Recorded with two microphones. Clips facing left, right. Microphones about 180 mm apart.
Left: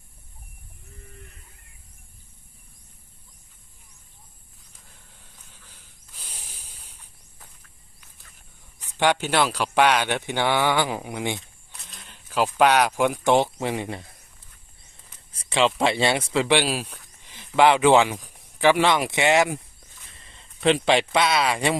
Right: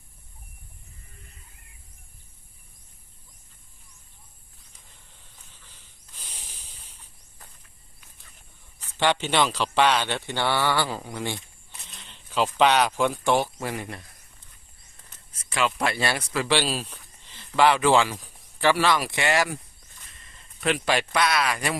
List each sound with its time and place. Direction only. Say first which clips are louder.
6.1 s snake: left 1 dB; 10° left (ahead or behind)
8.8 s speech: left 2 dB; 15° left (ahead or behind)
11.3 s vehicle: even; centre (ahead or behind)
12.0 s speech: left 1 dB; 10° left (ahead or behind); by 14.1 s 25° left (ahead or behind)
15.3 s a man's voice: left 5 dB; 30° left (ahead or behind)